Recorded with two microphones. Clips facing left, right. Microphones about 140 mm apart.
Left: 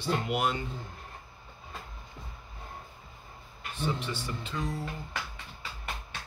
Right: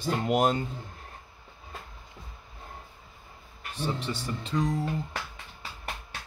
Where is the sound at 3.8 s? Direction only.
35° right (ahead or behind).